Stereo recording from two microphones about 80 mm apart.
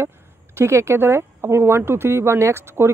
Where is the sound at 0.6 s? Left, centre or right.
Right.